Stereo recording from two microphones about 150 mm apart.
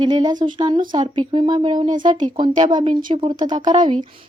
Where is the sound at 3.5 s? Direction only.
30° right (ahead or behind).